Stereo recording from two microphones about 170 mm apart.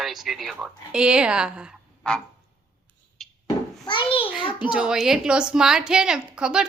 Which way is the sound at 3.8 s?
30° left (ahead or behind).